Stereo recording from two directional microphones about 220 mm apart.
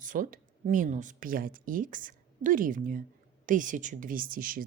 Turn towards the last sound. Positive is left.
turn(degrees=-40)  # may be behind; listen again after turning